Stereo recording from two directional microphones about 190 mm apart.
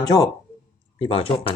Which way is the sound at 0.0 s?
20° left (ahead or behind).